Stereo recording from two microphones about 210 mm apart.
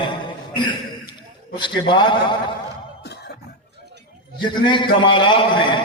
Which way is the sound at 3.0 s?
50° left (ahead or behind).